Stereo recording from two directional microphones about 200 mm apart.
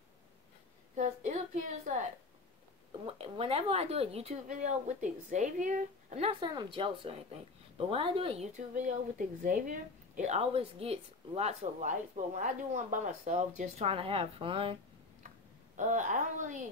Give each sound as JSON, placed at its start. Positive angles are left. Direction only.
{"t": 0.9, "sound": "speech", "side_deg": -40}
{"t": 3.1, "sound": "speech", "side_deg": -30}
{"t": 15.7, "sound": "speech", "side_deg": -40}